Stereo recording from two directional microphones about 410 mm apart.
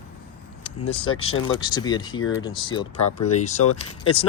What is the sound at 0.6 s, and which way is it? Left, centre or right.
Vehicle, centre.